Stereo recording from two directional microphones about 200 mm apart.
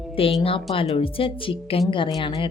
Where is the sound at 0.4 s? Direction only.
25° left (ahead or behind).